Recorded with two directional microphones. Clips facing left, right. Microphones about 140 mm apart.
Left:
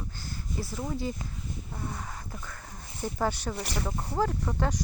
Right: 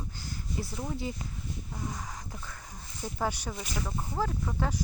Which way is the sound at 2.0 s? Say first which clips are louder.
Left 1 dB; 10° right (ahead or behind).